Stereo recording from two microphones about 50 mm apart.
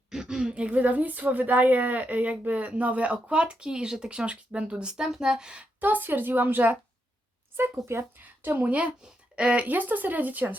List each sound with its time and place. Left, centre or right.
0.1 s a woman's voice: centre
5.8 s speech: right
7.5 s speech: right
8.4 s speech: right